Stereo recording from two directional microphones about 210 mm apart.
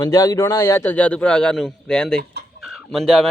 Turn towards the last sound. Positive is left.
turn(degrees=0)  # may be behind; listen again after turning